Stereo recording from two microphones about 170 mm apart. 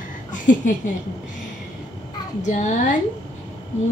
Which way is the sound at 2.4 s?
45° left (ahead or behind).